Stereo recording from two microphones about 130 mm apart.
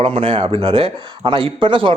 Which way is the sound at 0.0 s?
45° right (ahead or behind).